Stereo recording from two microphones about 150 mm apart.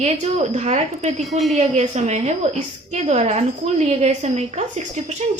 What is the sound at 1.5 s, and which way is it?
A woman's voice, 50° right (ahead or behind).